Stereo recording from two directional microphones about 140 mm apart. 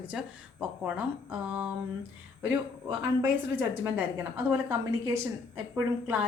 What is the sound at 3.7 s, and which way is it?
A woman's voice, 15° right (ahead or behind).